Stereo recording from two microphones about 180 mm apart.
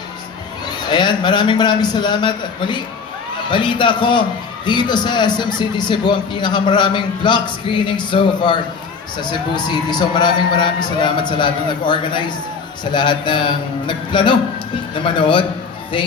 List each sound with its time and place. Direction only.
0.9 s a man's voice: 25° left (ahead or behind)